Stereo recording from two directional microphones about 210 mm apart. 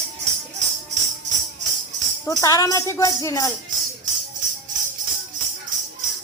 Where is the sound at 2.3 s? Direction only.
15° left (ahead or behind).